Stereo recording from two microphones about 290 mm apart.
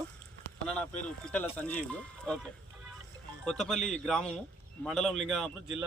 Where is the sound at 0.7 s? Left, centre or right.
Centre.